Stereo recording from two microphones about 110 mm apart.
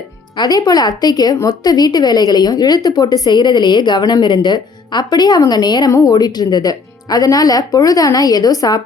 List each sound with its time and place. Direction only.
0.3 s a woman's voice: 35° left (ahead or behind)